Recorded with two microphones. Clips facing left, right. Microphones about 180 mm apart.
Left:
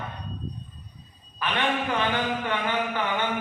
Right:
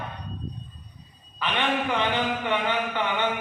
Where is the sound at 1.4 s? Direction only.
20° right (ahead or behind).